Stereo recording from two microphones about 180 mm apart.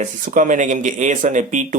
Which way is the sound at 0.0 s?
45° right (ahead or behind).